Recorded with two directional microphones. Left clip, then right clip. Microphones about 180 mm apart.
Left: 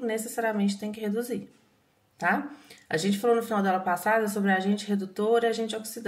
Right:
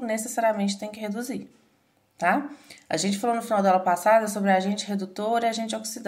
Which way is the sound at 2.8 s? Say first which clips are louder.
Even; 40° right (ahead or behind).